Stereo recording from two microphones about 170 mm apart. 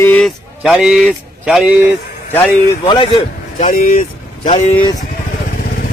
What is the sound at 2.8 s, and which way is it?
Speech, 30° left (ahead or behind).